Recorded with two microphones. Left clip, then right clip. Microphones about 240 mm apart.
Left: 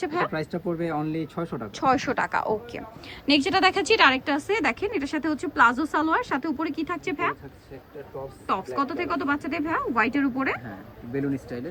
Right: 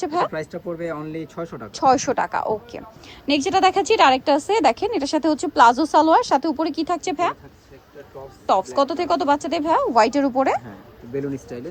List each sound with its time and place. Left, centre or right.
0.0 s speech: centre
0.8 s speech: centre
1.7 s a woman's voice: centre
8.7 s a woman's voice: centre
11.1 s speech: centre